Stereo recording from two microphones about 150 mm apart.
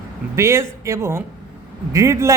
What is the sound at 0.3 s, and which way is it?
A man's voice, 20° right (ahead or behind).